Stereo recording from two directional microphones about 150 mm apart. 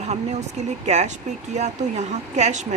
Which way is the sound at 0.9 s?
50° right (ahead or behind).